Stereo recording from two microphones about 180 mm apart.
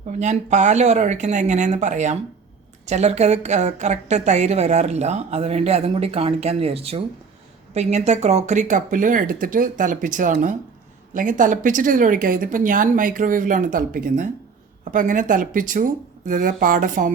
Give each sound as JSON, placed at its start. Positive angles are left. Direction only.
{"t": 0.1, "sound": "a woman's voice", "side_deg": -40}